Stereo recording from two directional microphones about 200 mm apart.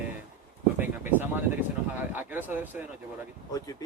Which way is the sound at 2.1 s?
10° right (ahead or behind).